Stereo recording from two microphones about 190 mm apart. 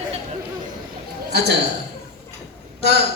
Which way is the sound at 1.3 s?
60° right (ahead or behind).